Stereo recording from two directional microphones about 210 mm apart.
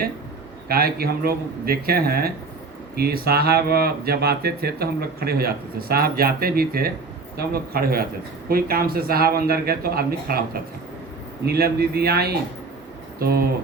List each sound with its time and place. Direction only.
0.7 s speech: 45° right (ahead or behind)